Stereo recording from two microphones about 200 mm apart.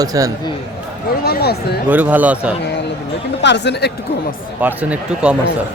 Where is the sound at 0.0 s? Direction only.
20° right (ahead or behind).